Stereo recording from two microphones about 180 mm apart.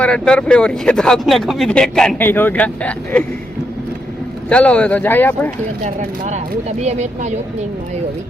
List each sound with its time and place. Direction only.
0.0 s speech: 5° left (ahead or behind)
4.4 s speech: 5° left (ahead or behind)
5.8 s speech: 40° right (ahead or behind)